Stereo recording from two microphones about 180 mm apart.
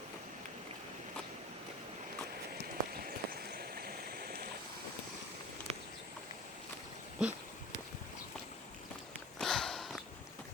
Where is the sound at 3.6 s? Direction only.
55° right (ahead or behind).